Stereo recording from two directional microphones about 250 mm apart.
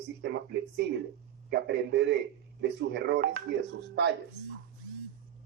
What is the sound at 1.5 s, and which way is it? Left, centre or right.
Speech, right.